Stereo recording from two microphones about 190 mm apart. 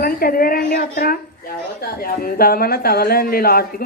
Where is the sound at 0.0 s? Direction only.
50° left (ahead or behind).